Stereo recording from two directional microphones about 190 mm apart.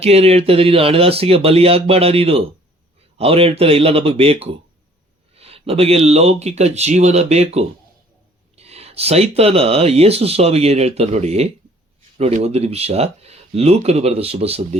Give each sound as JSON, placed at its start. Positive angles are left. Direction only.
{"t": 0.0, "sound": "speech", "side_deg": -35}